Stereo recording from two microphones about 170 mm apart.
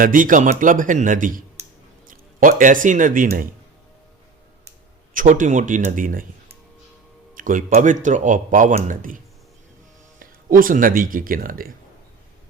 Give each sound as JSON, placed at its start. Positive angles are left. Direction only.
{"t": 0.0, "sound": "speech", "side_deg": -50}
{"t": 5.1, "sound": "speech", "side_deg": -50}
{"t": 7.3, "sound": "speech", "side_deg": -50}